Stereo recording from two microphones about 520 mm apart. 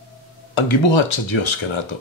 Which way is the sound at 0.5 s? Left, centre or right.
Left.